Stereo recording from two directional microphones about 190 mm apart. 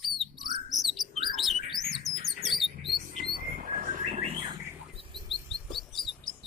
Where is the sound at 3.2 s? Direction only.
50° right (ahead or behind).